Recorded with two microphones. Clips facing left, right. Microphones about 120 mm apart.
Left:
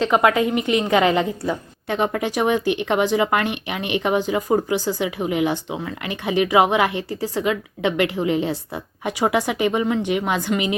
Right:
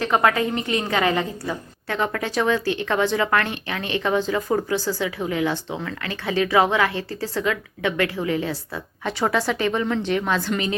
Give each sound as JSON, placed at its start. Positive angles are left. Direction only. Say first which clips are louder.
{"t": 0.0, "sound": "a woman's voice", "louder": "left 3 dB", "side_deg": 20}